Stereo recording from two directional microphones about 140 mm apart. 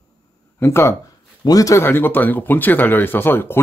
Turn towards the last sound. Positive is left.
turn(degrees=15)  # may be behind; listen again after turning